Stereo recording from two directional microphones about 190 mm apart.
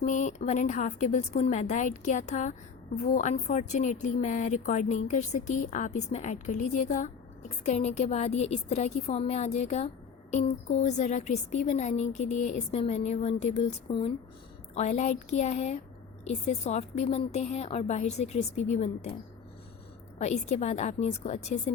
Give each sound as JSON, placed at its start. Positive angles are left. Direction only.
{"t": 0.0, "sound": "speech", "side_deg": 40}
{"t": 20.1, "sound": "speech", "side_deg": 35}